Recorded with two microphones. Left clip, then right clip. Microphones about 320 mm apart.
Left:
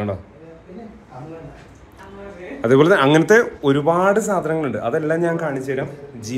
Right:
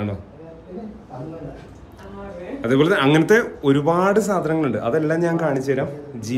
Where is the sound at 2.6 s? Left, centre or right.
Centre.